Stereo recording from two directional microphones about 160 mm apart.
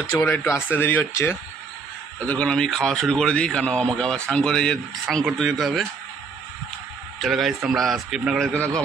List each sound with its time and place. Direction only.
0.1 s a man's voice: 15° left (ahead or behind); by 5.9 s centre (ahead or behind)
7.2 s a man's voice: centre (ahead or behind)